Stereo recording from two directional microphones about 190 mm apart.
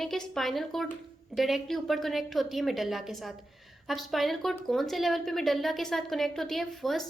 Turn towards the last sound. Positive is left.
turn(degrees=0)  # may be behind; listen again after turning